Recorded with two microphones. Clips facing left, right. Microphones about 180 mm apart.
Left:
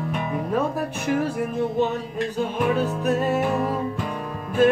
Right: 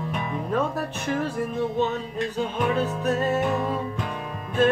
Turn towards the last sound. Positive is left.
turn(degrees=5)  # may be behind; listen again after turning